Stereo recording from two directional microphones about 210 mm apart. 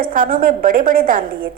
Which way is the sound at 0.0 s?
40° right (ahead or behind).